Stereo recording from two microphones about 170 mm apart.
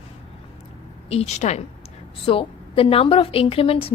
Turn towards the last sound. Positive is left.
turn(degrees=35)  # may be behind; listen again after turning